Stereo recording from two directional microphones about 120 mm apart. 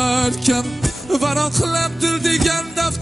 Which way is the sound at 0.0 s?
Centre (ahead or behind).